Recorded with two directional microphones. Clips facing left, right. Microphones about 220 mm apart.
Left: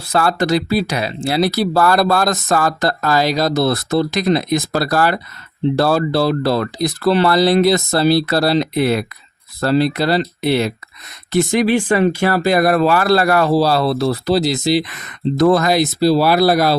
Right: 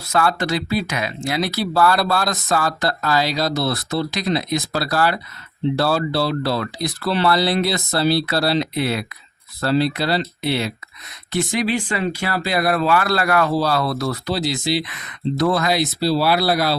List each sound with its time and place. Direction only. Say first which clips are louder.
0.1 s speech: left 4 dB; 40° left (ahead or behind)